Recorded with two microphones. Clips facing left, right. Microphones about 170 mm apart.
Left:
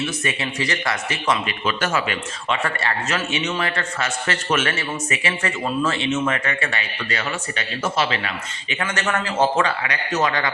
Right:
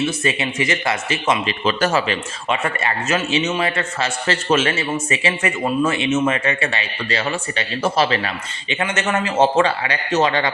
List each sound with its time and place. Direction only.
0.3 s a man's voice: 25° right (ahead or behind)
2.5 s a man's voice: 20° right (ahead or behind); by 8.3 s 35° right (ahead or behind)
8.7 s a man's voice: 20° right (ahead or behind)